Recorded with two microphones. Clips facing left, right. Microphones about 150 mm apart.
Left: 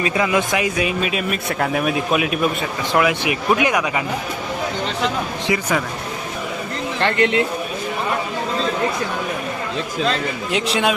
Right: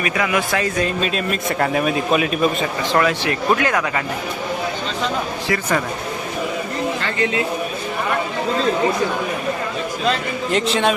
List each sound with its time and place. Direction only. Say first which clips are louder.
0.0 s speech: left 2 dB; 25° left (ahead or behind)
7.0 s speech: left 9 dB; 70° left (ahead or behind)
10.5 s speech: right 2 dB; centre (ahead or behind)